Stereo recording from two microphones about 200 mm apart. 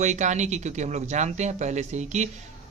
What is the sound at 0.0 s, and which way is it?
A man's voice, 35° right (ahead or behind).